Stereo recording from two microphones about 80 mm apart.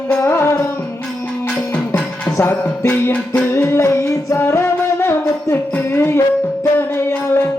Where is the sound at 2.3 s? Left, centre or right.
Left.